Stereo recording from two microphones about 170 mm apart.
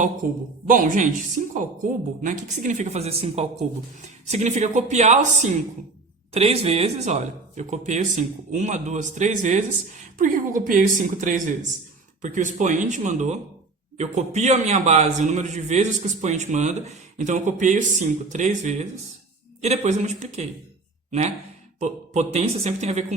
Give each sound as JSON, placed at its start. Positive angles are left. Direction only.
{"t": 0.7, "sound": "a man's voice", "side_deg": -50}